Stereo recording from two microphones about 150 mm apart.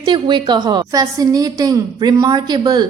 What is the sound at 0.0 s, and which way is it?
A woman's voice, 30° right (ahead or behind).